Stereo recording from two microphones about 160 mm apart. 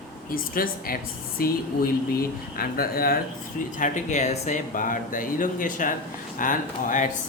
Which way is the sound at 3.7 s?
55° left (ahead or behind).